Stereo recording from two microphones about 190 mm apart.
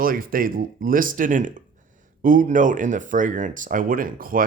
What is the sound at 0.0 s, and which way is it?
A man's voice, 50° right (ahead or behind).